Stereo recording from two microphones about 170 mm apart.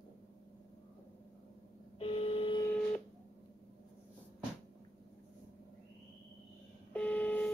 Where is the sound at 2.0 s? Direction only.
30° left (ahead or behind).